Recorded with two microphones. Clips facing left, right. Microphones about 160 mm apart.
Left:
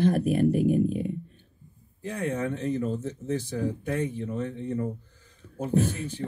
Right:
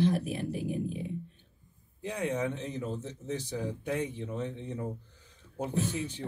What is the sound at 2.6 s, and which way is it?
Speech, 55° left (ahead or behind).